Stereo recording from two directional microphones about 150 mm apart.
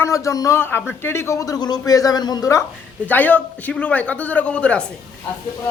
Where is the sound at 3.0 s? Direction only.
10° left (ahead or behind).